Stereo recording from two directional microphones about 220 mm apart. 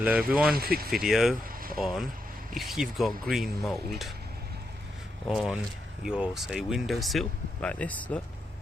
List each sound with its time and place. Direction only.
0.0 s speech: 5° right (ahead or behind)
0.5 s speech: 40° right (ahead or behind)
0.9 s speech: centre (ahead or behind)
1.5 s vehicle: 40° right (ahead or behind)
1.8 s speech: centre (ahead or behind)
5.3 s speech: 5° right (ahead or behind)